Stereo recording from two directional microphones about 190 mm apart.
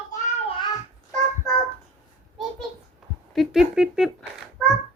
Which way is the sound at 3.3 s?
Centre (ahead or behind).